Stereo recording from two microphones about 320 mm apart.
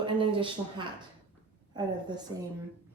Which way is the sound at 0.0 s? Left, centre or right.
Centre.